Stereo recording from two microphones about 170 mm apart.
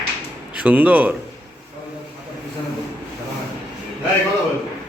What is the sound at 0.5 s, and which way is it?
Speech, 10° right (ahead or behind).